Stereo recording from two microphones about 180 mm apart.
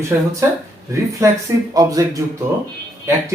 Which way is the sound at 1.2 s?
15° right (ahead or behind).